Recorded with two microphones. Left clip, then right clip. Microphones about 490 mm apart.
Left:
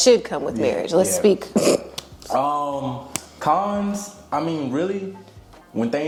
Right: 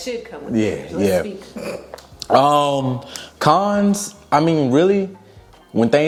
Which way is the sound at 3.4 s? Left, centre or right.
Right.